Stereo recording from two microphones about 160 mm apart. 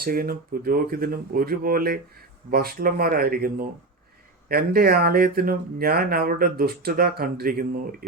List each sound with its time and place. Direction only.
0.0 s speech: 65° right (ahead or behind)